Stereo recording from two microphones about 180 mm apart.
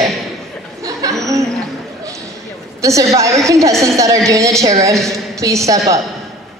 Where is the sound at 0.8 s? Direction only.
20° right (ahead or behind).